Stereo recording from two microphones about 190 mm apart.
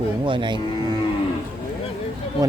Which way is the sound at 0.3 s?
25° right (ahead or behind).